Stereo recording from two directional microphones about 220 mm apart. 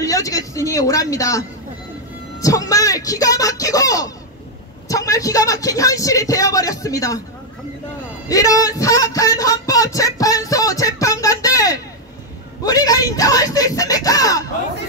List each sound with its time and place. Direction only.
0.0 s speech: 15° left (ahead or behind)
2.4 s speech: 15° left (ahead or behind)
8.3 s speech: 15° left (ahead or behind)